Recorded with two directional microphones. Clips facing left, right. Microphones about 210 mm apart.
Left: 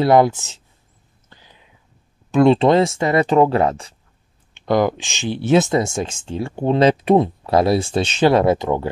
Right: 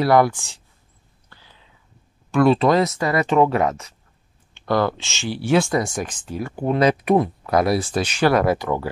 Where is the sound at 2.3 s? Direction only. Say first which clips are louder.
Left 3 dB; 25° left (ahead or behind).